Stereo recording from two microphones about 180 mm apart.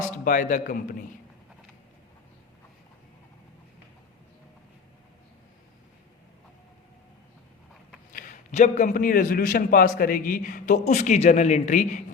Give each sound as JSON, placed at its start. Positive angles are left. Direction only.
{"t": 0.3, "sound": "a man's voice", "side_deg": 45}
{"t": 8.1, "sound": "a man's voice", "side_deg": 45}